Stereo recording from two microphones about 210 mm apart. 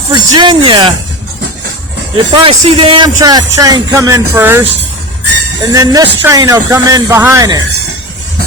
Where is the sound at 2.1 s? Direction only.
25° right (ahead or behind).